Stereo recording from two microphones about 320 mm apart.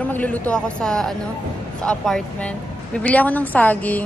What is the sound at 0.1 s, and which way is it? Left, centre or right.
A woman's voice, centre.